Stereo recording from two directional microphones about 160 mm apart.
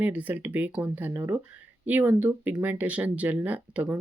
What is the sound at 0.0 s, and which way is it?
Speech, 10° right (ahead or behind).